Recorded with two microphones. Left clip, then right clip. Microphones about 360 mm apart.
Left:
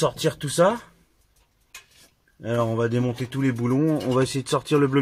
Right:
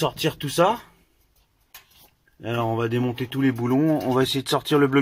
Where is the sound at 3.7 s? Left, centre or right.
Right.